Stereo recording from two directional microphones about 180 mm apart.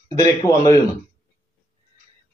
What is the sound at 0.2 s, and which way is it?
Speech, 15° left (ahead or behind).